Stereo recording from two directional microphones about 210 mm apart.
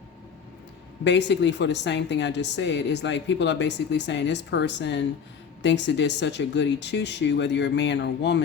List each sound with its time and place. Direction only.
1.0 s a woman's voice: 55° left (ahead or behind)